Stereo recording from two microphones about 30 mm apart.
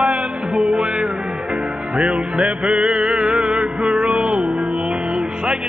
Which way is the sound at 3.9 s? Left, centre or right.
Right.